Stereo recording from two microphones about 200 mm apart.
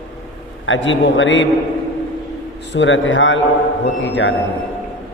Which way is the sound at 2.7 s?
65° left (ahead or behind).